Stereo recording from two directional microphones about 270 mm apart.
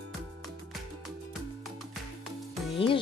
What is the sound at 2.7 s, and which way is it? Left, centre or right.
Speech, centre.